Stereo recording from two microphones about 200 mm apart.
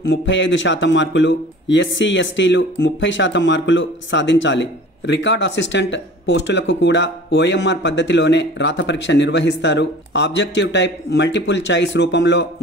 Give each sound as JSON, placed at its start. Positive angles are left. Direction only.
{"t": 0.0, "sound": "a man's voice", "side_deg": 70}